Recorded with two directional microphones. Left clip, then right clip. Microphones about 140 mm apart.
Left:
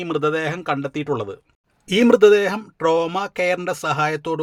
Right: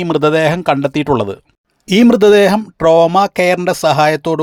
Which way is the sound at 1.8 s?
45° right (ahead or behind).